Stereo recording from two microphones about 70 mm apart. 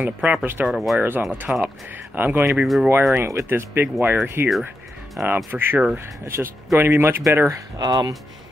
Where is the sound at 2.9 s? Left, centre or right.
Right.